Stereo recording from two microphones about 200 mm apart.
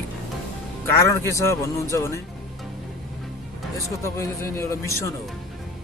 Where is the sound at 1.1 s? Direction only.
15° left (ahead or behind).